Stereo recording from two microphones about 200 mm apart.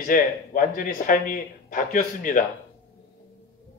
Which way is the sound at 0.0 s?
40° left (ahead or behind).